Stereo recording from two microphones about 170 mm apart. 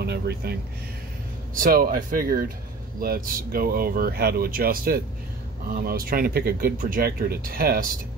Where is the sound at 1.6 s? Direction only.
60° right (ahead or behind).